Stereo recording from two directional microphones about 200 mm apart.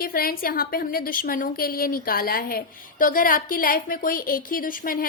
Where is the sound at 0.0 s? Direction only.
50° left (ahead or behind).